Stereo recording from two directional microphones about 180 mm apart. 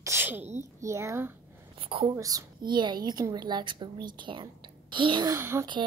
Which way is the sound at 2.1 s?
15° right (ahead or behind).